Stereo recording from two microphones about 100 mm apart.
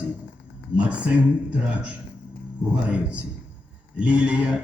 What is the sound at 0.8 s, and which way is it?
Speech, 10° right (ahead or behind).